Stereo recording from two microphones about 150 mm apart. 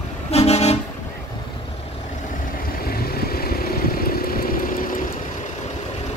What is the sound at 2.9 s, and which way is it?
Vehicle, 90° left.